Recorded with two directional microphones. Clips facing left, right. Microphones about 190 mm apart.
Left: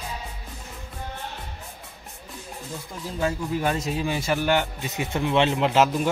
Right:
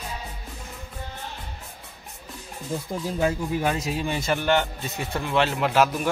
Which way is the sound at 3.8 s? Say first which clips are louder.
Even; centre (ahead or behind).